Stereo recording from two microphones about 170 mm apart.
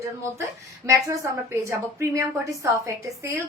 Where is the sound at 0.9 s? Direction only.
20° right (ahead or behind).